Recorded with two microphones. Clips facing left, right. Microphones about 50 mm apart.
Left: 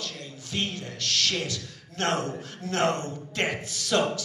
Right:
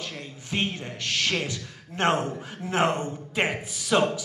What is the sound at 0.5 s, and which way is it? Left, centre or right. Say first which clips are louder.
A man's voice: right 3 dB; right.